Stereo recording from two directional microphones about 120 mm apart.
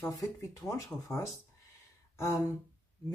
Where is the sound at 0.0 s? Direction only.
30° left (ahead or behind).